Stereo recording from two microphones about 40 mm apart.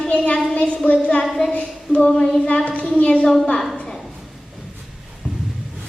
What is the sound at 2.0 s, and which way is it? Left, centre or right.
Speech, left.